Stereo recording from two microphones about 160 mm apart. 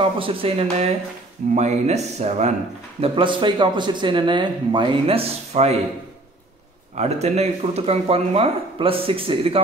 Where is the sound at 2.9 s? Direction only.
30° right (ahead or behind).